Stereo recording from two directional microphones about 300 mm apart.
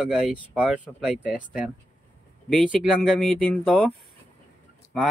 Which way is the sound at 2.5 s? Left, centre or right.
Centre.